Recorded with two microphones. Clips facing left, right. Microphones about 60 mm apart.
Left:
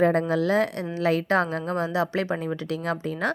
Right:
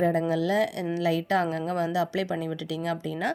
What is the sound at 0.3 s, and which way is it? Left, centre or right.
A woman's voice, left.